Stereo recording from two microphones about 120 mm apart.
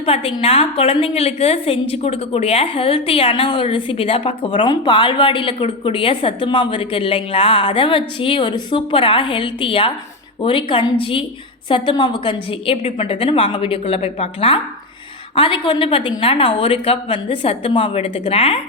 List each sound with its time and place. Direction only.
0.0 s a woman's voice: 50° left (ahead or behind)